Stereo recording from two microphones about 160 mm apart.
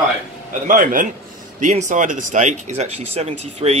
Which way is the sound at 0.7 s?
55° right (ahead or behind).